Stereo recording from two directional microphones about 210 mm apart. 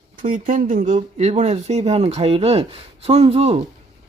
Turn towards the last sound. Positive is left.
turn(degrees=-30)  # may be behind; listen again after turning